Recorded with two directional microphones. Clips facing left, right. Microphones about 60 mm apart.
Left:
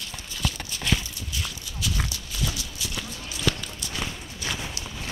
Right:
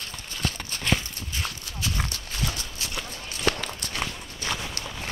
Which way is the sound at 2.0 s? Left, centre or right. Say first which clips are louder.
Even; right.